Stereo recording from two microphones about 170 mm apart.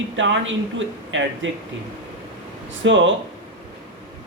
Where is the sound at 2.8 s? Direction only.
90° right.